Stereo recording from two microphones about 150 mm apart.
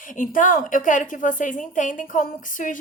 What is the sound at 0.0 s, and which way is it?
A woman's voice, 65° left (ahead or behind).